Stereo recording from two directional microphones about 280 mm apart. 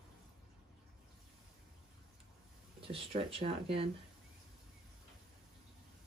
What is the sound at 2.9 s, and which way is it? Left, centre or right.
Speech, centre.